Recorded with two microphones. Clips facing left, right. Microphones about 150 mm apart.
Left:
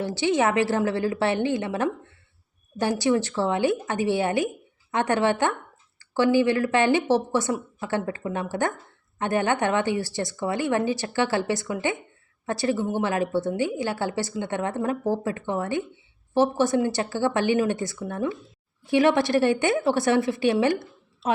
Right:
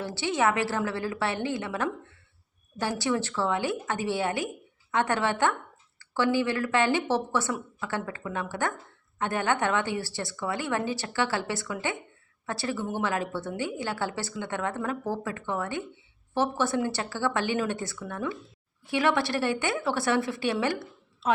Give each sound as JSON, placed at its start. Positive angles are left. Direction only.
{"t": 0.0, "sound": "a woman's voice", "side_deg": 15}